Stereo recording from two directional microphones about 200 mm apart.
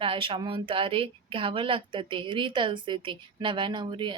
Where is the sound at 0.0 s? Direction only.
25° right (ahead or behind).